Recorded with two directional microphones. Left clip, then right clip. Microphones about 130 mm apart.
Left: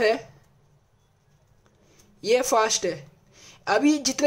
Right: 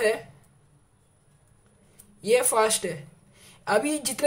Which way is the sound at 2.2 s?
35° left (ahead or behind).